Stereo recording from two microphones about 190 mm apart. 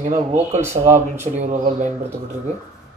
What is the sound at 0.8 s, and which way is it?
Speech, 35° right (ahead or behind).